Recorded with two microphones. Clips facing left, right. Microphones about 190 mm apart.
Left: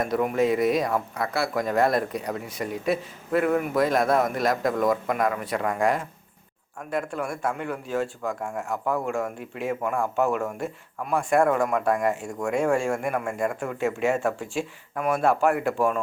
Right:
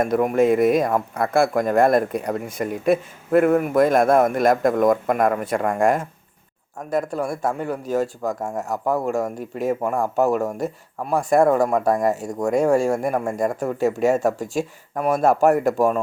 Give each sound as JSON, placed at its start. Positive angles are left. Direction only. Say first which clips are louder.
{"t": 0.0, "sound": "speech", "louder": "right 5 dB", "side_deg": -50}